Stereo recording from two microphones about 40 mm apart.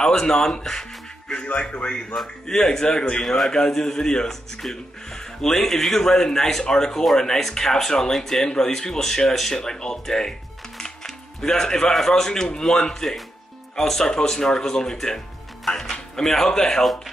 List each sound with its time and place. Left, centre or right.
0.1 s speech: centre
1.6 s speech: left
2.4 s speech: centre
11.4 s speech: centre